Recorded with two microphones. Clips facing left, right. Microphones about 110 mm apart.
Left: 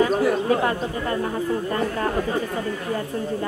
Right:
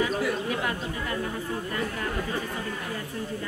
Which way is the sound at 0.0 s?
40° left (ahead or behind).